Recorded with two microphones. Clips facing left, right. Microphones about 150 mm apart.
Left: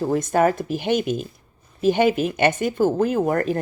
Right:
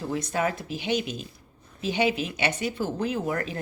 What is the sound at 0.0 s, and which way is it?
Speech, 50° left (ahead or behind).